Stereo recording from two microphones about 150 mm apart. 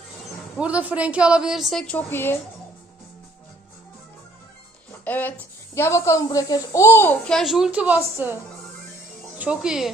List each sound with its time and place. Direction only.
0.5 s a woman's voice: 10° right (ahead or behind); by 2.4 s 15° left (ahead or behind)
5.0 s a child's voice: 10° left (ahead or behind)
7.3 s a woman's voice: centre (ahead or behind)
9.4 s a woman's voice: 5° right (ahead or behind)